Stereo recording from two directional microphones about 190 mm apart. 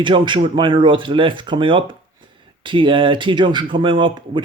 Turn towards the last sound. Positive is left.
turn(degrees=-25)  # may be behind; listen again after turning